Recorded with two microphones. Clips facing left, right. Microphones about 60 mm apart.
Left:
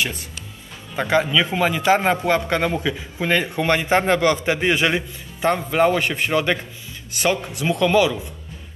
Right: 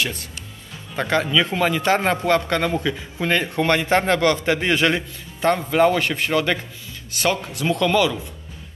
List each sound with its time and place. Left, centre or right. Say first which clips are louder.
0.9 s a man's voice: left 1 dB; centre